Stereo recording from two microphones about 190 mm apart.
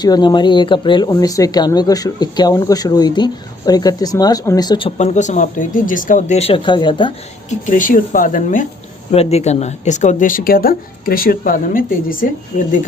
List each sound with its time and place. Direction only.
0.0 s speech: 20° left (ahead or behind)
7.7 s speech: 45° left (ahead or behind)